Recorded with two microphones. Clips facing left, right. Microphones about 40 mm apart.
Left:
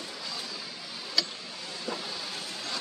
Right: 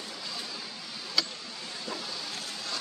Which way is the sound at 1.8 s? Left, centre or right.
Centre.